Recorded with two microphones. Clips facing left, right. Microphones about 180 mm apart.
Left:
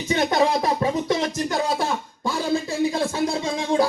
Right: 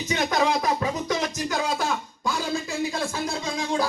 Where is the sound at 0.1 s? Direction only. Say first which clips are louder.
Left 4 dB; 30° left (ahead or behind).